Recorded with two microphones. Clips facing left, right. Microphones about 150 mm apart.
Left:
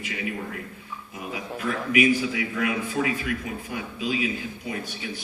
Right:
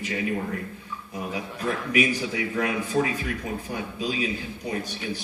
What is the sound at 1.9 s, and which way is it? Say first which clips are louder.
A man's voice: left 5 dB; 35° right (ahead or behind).